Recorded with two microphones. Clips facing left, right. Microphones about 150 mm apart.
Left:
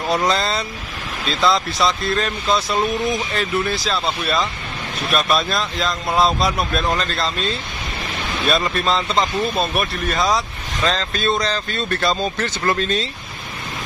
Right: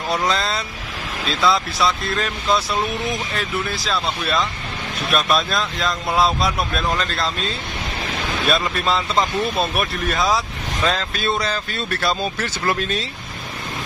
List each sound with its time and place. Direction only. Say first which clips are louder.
0.1 s speech: left 2 dB; centre (ahead or behind)
8.5 s speech: left 2 dB; centre (ahead or behind)